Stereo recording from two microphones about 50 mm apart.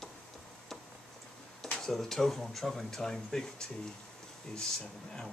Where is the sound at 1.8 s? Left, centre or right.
Centre.